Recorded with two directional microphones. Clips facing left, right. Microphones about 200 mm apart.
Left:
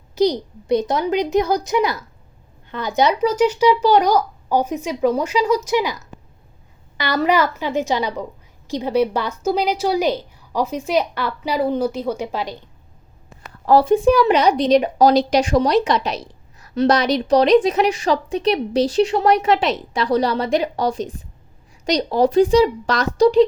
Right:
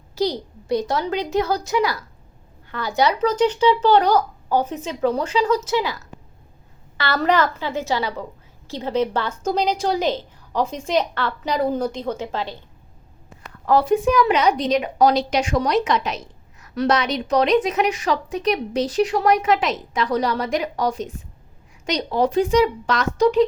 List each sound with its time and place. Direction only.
0.2 s a woman's voice: 20° left (ahead or behind)
3.2 s a woman's voice: 10° left (ahead or behind)
13.4 s a woman's voice: 35° left (ahead or behind)